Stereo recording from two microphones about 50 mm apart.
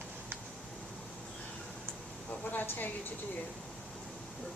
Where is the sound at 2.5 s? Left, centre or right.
Left.